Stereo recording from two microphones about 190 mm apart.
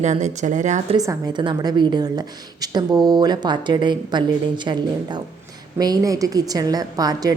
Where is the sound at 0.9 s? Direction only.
20° right (ahead or behind).